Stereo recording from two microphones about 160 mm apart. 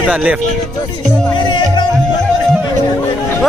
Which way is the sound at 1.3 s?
30° left (ahead or behind).